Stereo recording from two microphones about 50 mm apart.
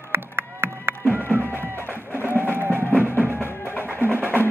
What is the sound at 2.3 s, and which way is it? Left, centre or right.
Music, left.